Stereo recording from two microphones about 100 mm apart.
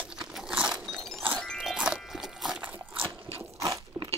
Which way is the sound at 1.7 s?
5° right (ahead or behind).